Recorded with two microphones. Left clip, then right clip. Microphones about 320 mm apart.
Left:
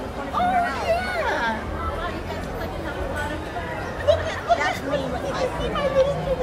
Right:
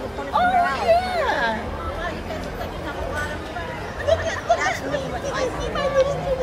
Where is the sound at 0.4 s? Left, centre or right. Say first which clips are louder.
Right 3 dB; right.